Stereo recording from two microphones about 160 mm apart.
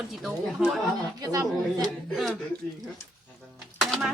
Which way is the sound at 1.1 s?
20° right (ahead or behind).